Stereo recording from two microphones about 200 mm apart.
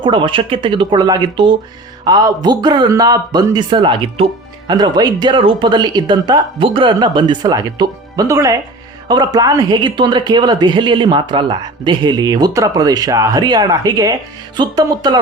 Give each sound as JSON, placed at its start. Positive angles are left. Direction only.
{"t": 0.0, "sound": "speech", "side_deg": -25}